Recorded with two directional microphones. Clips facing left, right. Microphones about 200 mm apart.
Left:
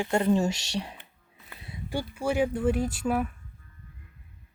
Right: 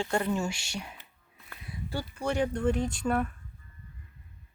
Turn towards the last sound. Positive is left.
turn(degrees=5)  # may be behind; listen again after turning